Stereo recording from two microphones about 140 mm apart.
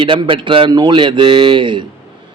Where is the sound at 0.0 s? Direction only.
35° right (ahead or behind).